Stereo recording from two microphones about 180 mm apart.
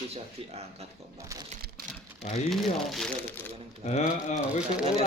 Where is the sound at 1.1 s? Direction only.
15° right (ahead or behind).